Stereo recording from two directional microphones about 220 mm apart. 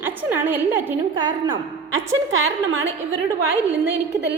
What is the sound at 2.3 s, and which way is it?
Speech, 65° right (ahead or behind).